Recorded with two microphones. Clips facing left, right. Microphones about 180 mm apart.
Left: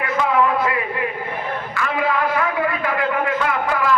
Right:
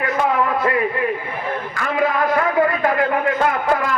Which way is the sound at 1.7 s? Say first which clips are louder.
Right 1 dB; 45° right (ahead or behind).